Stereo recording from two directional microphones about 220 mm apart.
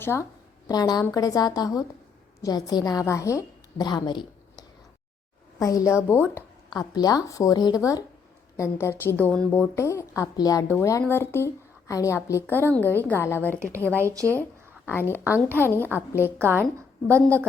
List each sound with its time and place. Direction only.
0.0 s a woman's voice: 10° left (ahead or behind)
13.6 s speech: 10° right (ahead or behind)
14.8 s a woman's voice: 10° left (ahead or behind)
16.4 s a woman's voice: 10° right (ahead or behind)